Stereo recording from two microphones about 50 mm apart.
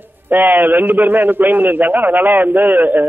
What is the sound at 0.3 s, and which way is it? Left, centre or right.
A man's voice, right.